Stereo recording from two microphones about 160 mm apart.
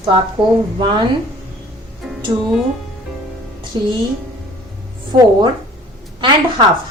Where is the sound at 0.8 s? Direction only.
30° right (ahead or behind).